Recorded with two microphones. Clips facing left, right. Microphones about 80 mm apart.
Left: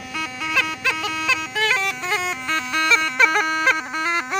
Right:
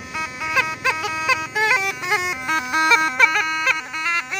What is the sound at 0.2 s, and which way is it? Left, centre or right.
Music, centre.